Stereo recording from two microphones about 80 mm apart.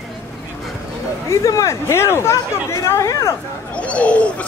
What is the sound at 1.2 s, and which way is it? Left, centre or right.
Speech, left.